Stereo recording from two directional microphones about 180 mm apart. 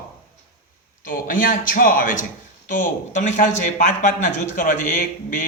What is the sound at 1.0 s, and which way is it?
A man's voice, 50° left (ahead or behind).